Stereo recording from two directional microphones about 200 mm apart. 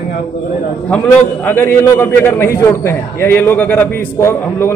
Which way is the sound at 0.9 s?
10° left (ahead or behind).